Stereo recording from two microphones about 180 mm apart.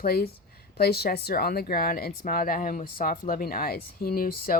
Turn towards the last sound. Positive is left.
turn(degrees=55)  # may be behind; listen again after turning